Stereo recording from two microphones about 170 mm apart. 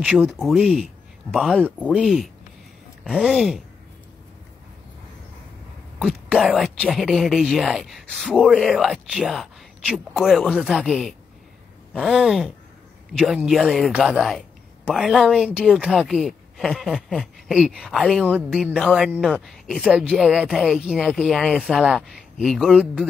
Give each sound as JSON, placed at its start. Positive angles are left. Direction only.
{"t": 0.3, "sound": "a woman's voice", "side_deg": 0}
{"t": 5.9, "sound": "a woman's voice", "side_deg": 0}